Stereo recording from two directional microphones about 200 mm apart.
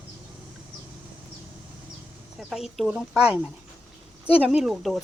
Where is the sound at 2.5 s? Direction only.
Centre (ahead or behind).